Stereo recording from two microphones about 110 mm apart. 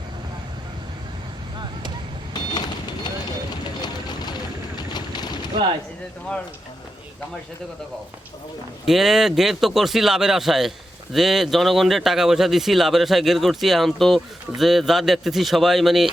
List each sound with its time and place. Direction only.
2.3 s vehicle: 40° left (ahead or behind)
8.9 s speech: 5° right (ahead or behind)